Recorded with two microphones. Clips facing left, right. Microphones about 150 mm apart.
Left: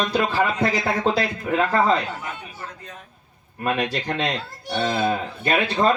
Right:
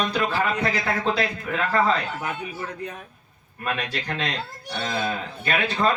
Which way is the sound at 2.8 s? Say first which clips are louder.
Right 8 dB; 60° right (ahead or behind).